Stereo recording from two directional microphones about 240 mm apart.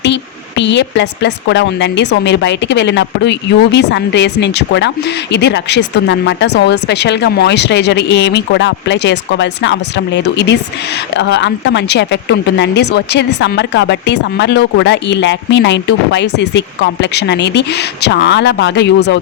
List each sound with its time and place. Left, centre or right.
0.0 s speech: left